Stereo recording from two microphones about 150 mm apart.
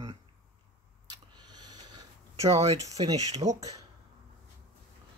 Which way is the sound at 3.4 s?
50° right (ahead or behind).